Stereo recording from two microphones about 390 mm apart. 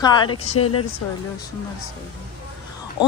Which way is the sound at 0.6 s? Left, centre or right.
Left.